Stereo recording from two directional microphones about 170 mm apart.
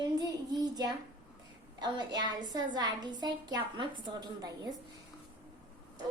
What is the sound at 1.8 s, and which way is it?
A woman's voice, 25° right (ahead or behind).